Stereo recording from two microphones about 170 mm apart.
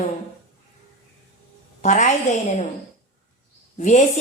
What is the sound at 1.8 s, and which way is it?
Speech, 45° left (ahead or behind).